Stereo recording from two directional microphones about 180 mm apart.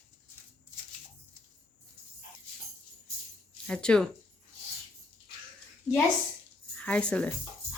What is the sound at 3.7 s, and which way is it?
Speech, 5° left (ahead or behind).